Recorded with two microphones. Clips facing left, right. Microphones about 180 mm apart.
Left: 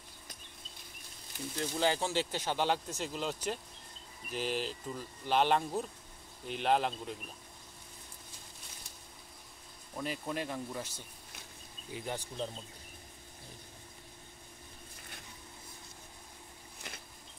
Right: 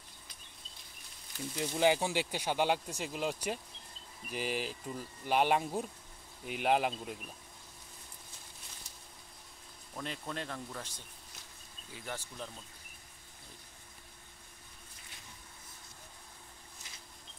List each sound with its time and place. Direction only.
1.6 s speech: 15° right (ahead or behind)
9.9 s speech: 5° left (ahead or behind)
11.9 s speech: 20° left (ahead or behind)
16.8 s a sound: 60° left (ahead or behind)